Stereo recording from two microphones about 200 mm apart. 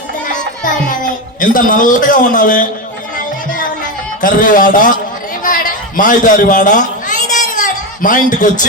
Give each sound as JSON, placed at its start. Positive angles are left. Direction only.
{"t": 0.6, "sound": "a child's voice", "side_deg": 40}
{"t": 4.2, "sound": "a man's voice", "side_deg": 40}
{"t": 6.0, "sound": "a child's voice", "side_deg": 40}